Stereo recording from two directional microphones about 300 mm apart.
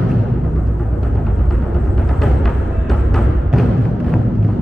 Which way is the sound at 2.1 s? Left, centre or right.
Centre.